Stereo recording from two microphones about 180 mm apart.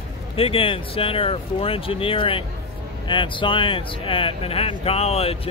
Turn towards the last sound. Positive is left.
turn(degrees=35)  # may be behind; listen again after turning